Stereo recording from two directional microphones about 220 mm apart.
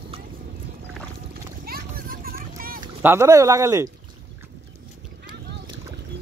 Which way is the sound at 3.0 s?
10° right (ahead or behind).